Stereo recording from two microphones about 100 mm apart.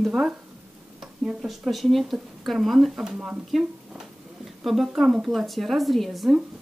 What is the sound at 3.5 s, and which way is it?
Speech, centre (ahead or behind).